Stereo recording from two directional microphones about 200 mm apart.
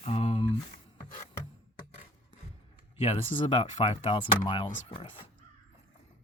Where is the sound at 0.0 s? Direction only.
30° left (ahead or behind).